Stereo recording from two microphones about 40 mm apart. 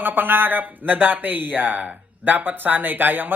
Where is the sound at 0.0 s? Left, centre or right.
Right.